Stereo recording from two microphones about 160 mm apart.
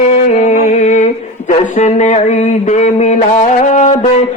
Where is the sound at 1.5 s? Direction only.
50° left (ahead or behind).